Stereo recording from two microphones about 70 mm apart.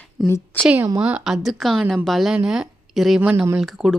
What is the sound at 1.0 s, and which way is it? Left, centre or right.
Speech, centre.